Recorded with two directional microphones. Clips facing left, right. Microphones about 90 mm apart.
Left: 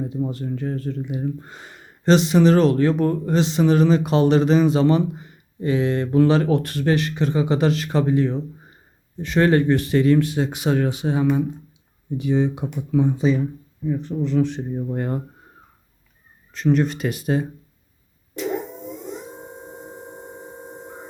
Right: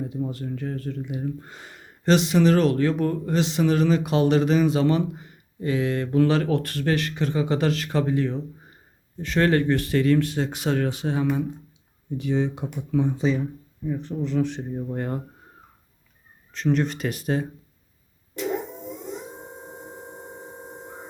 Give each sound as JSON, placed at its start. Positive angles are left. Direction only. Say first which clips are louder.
{"t": 0.1, "sound": "speech", "louder": "left 3 dB", "side_deg": 30}
{"t": 10.2, "sound": "speech", "louder": "left 3 dB", "side_deg": 10}
{"t": 16.5, "sound": "speech", "louder": "left 4 dB", "side_deg": 5}